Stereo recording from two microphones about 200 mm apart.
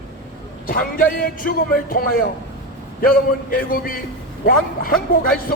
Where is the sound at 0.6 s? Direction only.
45° left (ahead or behind).